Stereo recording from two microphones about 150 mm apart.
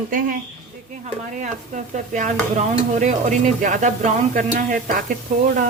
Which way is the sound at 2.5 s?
55° right (ahead or behind).